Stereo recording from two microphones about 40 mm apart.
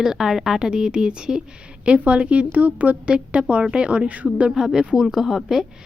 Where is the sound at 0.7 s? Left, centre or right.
Right.